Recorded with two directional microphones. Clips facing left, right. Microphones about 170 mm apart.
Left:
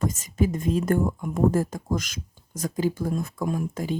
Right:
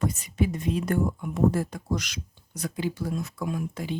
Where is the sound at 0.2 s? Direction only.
45° left (ahead or behind).